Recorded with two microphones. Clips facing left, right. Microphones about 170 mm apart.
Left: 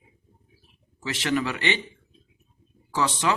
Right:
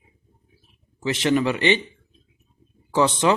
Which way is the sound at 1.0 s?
20° right (ahead or behind).